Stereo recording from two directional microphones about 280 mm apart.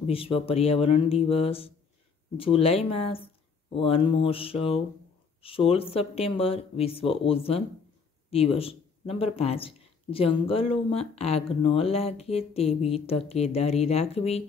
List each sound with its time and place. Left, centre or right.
0.0 s speech: centre